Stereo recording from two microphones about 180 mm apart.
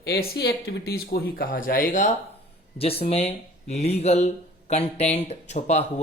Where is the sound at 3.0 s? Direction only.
35° left (ahead or behind).